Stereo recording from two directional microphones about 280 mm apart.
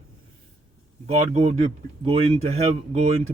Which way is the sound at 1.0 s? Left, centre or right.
Centre.